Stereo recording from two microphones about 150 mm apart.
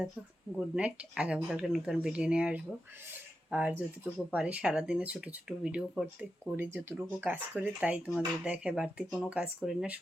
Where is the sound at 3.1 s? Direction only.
10° right (ahead or behind).